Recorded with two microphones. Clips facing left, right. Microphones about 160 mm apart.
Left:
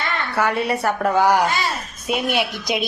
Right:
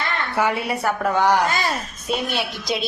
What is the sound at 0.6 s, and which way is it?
A woman's voice, centre (ahead or behind).